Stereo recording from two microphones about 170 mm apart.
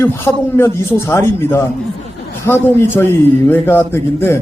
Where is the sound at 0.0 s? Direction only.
15° left (ahead or behind).